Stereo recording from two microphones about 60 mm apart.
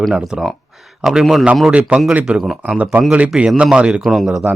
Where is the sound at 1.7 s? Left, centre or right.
Right; by 4.4 s centre.